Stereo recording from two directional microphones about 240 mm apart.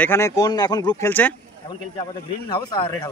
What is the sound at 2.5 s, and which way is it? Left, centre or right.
Speech, centre.